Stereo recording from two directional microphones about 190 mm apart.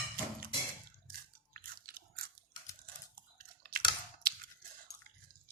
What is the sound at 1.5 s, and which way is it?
Biting, 50° right (ahead or behind).